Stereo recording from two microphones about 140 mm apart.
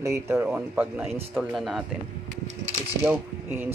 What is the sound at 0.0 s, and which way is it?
Speech, 20° right (ahead or behind).